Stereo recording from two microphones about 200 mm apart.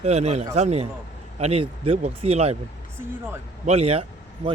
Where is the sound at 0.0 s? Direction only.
35° right (ahead or behind).